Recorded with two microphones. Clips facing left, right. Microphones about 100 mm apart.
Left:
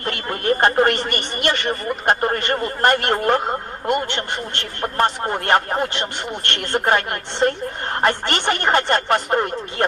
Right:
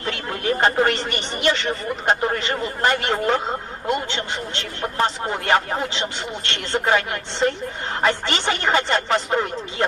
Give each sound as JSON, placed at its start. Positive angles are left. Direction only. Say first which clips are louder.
{"t": 0.0, "sound": "speech", "louder": "left 2 dB", "side_deg": 55}